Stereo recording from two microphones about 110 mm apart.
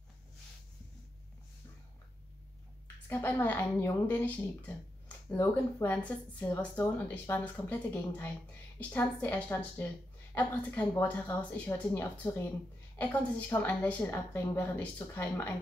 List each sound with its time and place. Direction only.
3.1 s a woman's voice: 20° left (ahead or behind)